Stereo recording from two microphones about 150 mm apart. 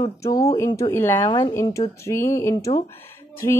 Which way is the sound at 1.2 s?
30° left (ahead or behind).